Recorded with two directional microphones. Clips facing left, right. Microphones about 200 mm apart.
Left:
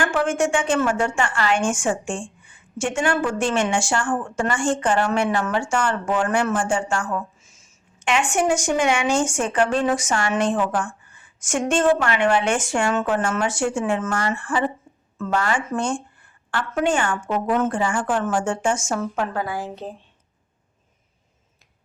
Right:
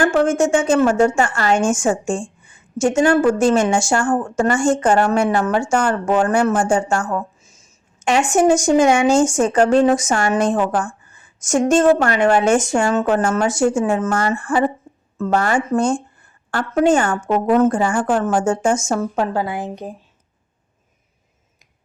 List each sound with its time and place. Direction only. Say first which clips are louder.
0.0 s a woman's voice: right 6 dB; 40° right (ahead or behind); by 20.0 s 15° right (ahead or behind)